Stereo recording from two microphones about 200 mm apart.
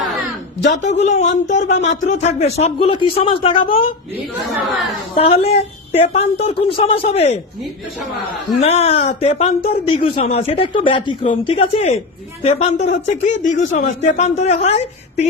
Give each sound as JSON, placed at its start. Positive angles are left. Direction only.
{"t": 0.8, "sound": "speech", "side_deg": 35}
{"t": 5.1, "sound": "speech", "side_deg": 30}
{"t": 8.4, "sound": "speech", "side_deg": 30}